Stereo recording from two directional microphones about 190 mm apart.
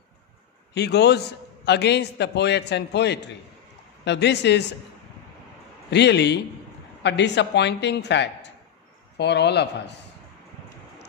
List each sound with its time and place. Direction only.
0.7 s a man's voice: 60° left (ahead or behind)
5.9 s a man's voice: 65° left (ahead or behind)